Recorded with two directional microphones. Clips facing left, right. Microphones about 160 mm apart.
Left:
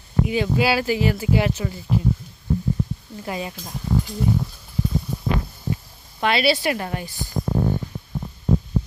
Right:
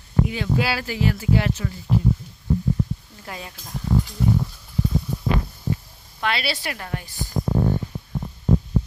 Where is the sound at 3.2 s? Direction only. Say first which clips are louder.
Left 7 dB; 10° left (ahead or behind).